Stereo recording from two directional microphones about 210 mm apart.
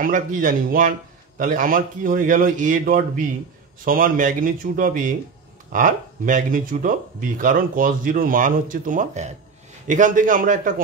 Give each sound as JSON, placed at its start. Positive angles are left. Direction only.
{"t": 0.0, "sound": "speech", "side_deg": -40}